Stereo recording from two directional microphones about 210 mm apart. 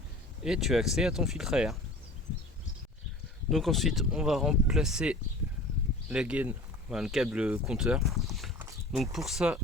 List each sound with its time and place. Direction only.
0.4 s speech: centre (ahead or behind)
3.5 s speech: centre (ahead or behind)